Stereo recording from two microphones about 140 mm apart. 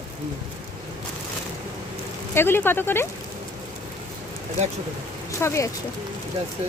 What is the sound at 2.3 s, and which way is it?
Speech, 15° left (ahead or behind).